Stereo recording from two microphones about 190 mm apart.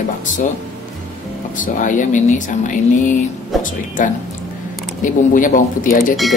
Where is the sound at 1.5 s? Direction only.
45° left (ahead or behind).